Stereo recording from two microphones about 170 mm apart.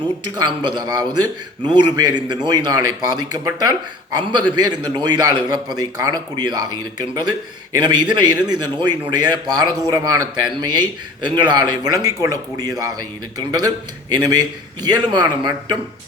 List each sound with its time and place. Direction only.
0.3 s speech: 25° right (ahead or behind)